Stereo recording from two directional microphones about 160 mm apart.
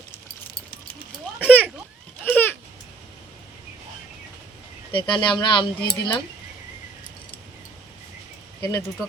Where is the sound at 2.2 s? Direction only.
10° left (ahead or behind).